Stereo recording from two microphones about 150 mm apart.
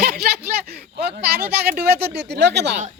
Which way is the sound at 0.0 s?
90° right.